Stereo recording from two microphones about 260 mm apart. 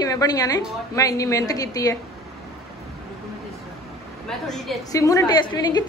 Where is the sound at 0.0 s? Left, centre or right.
Centre.